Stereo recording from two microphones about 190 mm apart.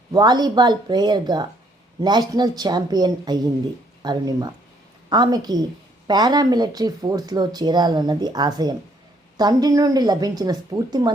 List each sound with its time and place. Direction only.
0.1 s speech: 20° right (ahead or behind)